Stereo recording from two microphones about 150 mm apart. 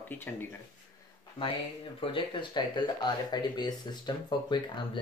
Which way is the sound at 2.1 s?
30° left (ahead or behind).